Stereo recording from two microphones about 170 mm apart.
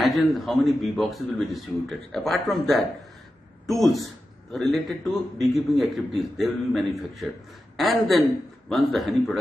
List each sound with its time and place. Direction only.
0.2 s a man's voice: centre (ahead or behind)